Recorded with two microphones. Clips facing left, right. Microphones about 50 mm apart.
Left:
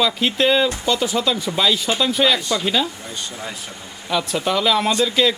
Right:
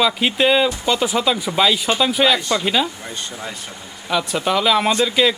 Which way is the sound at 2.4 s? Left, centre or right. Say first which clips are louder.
Right 2 dB; right.